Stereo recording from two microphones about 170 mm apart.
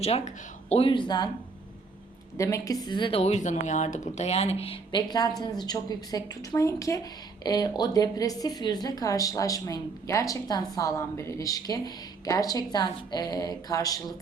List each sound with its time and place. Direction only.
0.7 s speech: 30° left (ahead or behind)
2.4 s speech: 20° left (ahead or behind)